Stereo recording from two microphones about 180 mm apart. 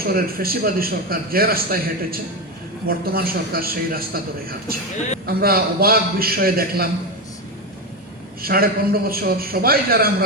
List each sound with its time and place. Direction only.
0.0 s a man's voice: 55° right (ahead or behind)
8.4 s a man's voice: 55° right (ahead or behind)